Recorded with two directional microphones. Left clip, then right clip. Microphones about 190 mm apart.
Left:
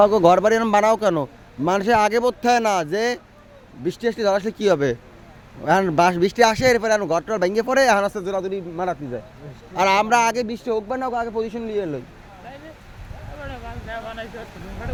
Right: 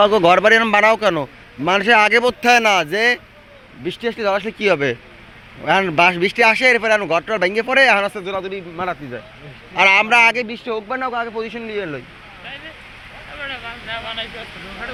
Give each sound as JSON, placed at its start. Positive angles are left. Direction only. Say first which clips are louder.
{"t": 0.0, "sound": "speech", "louder": "right 2 dB", "side_deg": 10}
{"t": 3.8, "sound": "speech", "louder": "right 1 dB", "side_deg": 30}
{"t": 9.7, "sound": "speech", "louder": "right 4 dB", "side_deg": 20}
{"t": 10.3, "sound": "speech", "louder": "right 1 dB", "side_deg": 40}
{"t": 13.4, "sound": "speech", "louder": "right 7 dB", "side_deg": 40}